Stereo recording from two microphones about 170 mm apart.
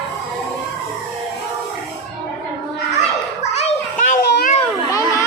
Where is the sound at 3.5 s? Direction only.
40° left (ahead or behind).